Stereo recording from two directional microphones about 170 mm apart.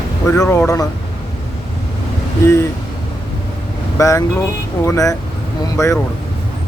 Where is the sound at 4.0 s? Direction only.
20° left (ahead or behind).